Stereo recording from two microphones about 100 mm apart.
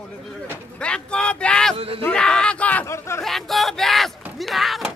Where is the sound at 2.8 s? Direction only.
25° left (ahead or behind).